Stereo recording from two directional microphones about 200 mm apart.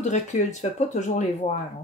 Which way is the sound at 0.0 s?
35° left (ahead or behind).